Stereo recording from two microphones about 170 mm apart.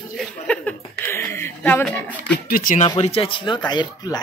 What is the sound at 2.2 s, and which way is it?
Speech, 60° left (ahead or behind).